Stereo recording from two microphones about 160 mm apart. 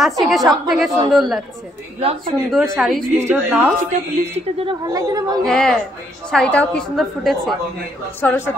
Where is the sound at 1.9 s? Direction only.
40° right (ahead or behind).